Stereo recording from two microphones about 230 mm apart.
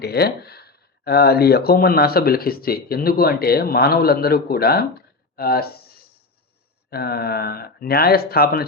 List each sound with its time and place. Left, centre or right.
0.0 s speech: left